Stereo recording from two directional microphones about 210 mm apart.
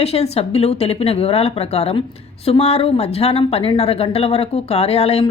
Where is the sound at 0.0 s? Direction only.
30° left (ahead or behind).